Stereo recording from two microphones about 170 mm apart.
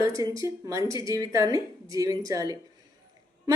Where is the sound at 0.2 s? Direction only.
20° right (ahead or behind).